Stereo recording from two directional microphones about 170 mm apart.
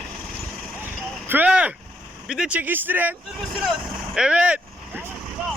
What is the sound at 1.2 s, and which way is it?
Speech, 10° right (ahead or behind).